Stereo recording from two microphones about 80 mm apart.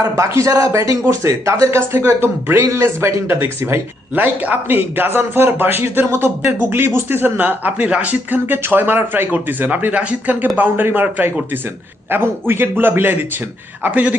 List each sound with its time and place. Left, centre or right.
0.2 s speech: right; by 14.2 s centre